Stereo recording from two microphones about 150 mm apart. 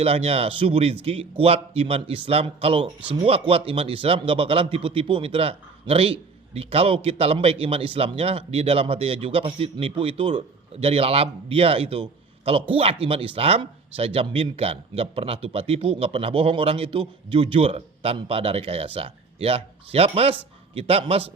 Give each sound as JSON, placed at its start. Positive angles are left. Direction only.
{"t": 0.0, "sound": "a man's voice", "side_deg": -40}